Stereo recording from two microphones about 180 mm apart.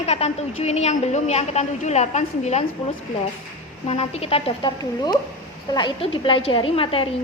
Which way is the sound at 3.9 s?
35° left (ahead or behind).